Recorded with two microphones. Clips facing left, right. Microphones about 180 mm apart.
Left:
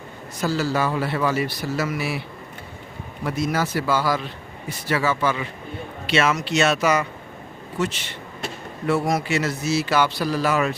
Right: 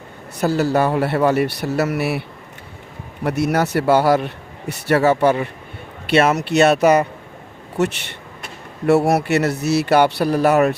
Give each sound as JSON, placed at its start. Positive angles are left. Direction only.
{"t": 0.4, "sound": "speech", "side_deg": -60}
{"t": 3.2, "sound": "speech", "side_deg": -65}
{"t": 8.9, "sound": "speech", "side_deg": -70}